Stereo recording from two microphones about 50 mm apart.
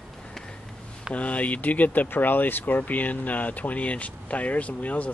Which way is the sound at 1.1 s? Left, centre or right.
Left.